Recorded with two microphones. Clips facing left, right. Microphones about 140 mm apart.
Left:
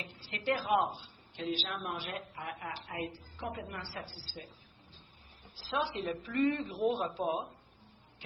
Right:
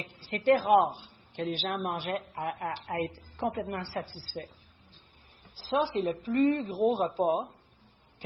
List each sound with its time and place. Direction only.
0.2 s a woman's voice: 45° right (ahead or behind)
5.5 s speech: 35° right (ahead or behind)